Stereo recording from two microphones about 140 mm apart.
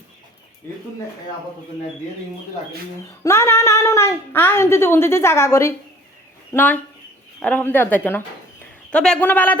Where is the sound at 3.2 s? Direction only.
20° left (ahead or behind).